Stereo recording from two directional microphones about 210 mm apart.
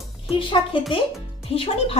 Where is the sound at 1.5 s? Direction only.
25° left (ahead or behind).